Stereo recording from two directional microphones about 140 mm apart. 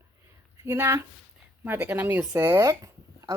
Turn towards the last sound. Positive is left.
turn(degrees=-25)  # may be behind; listen again after turning